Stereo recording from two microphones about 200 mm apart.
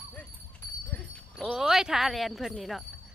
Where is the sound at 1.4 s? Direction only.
Centre (ahead or behind).